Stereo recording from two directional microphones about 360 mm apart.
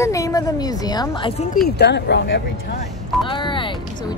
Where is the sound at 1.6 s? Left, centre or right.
Left.